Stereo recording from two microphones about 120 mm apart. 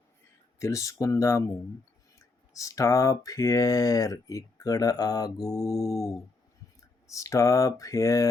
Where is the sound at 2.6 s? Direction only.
25° left (ahead or behind).